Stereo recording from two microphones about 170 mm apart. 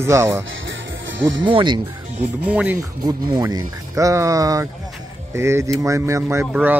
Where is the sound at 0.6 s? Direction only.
90° right.